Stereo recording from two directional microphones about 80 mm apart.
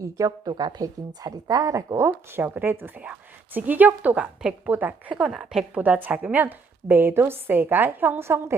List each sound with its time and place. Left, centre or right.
0.0 s a woman's voice: right
0.8 s a woman's voice: right
2.0 s a woman's voice: right
5.1 s a woman's voice: centre
5.8 s a woman's voice: centre